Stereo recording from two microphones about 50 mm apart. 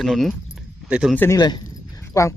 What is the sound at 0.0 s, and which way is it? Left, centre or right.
Speech, centre.